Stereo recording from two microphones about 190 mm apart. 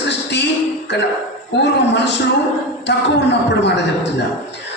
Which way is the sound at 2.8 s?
65° left (ahead or behind).